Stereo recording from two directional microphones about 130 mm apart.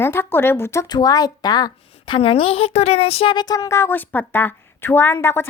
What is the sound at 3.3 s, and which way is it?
A woman's voice, 30° left (ahead or behind).